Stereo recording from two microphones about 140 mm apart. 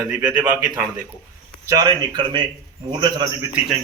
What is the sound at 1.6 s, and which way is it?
Speech, 30° right (ahead or behind).